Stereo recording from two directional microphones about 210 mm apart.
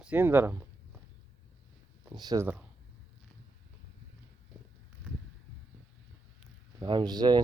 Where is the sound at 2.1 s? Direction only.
15° right (ahead or behind).